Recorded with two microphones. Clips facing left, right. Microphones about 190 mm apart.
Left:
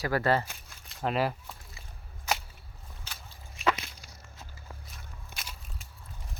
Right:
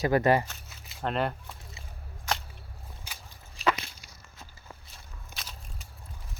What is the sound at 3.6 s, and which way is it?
Whip, 35° right (ahead or behind).